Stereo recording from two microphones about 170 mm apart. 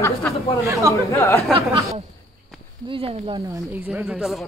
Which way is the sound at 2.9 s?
30° right (ahead or behind).